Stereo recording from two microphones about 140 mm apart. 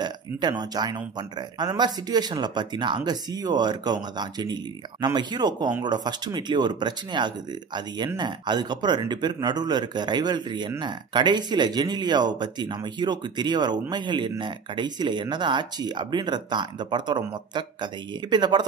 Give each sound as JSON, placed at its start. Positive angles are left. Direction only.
{"t": 0.0, "sound": "speech", "side_deg": -30}